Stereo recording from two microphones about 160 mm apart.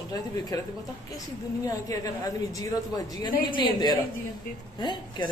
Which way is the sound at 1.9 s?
20° left (ahead or behind).